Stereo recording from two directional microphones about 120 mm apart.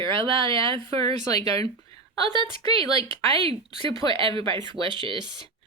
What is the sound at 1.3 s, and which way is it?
Speech, 30° left (ahead or behind).